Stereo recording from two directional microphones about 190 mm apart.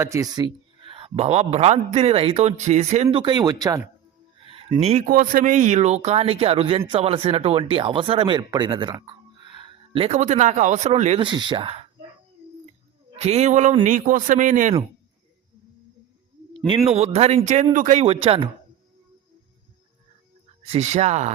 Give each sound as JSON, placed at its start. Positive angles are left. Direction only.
{"t": 0.0, "sound": "speech", "side_deg": -15}
{"t": 4.4, "sound": "a sound", "side_deg": -30}
{"t": 5.0, "sound": "speech", "side_deg": -50}
{"t": 13.1, "sound": "speech", "side_deg": -35}
{"t": 16.6, "sound": "speech", "side_deg": -30}
{"t": 20.6, "sound": "speech", "side_deg": -35}